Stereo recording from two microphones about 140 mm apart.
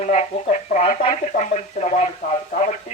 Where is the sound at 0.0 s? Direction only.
55° left (ahead or behind).